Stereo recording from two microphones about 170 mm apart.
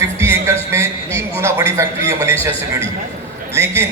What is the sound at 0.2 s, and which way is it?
Music, 15° right (ahead or behind).